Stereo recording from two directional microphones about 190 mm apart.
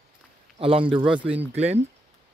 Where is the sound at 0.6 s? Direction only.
30° right (ahead or behind).